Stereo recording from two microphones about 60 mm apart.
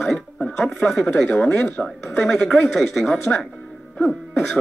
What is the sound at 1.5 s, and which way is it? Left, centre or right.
Speech, left.